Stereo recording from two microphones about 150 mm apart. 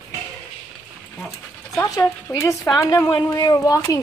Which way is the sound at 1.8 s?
15° left (ahead or behind).